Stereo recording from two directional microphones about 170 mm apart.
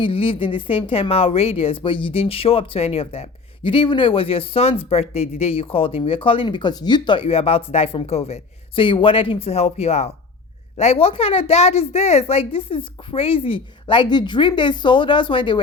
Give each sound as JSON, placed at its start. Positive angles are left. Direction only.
{"t": 0.0, "sound": "a woman's voice", "side_deg": 30}